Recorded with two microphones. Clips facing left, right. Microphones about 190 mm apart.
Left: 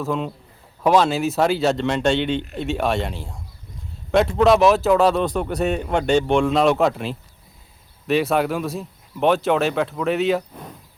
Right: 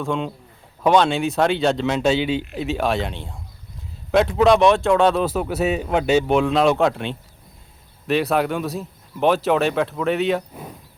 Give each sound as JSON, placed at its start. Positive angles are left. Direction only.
{"t": 0.0, "sound": "a man's voice", "side_deg": 5}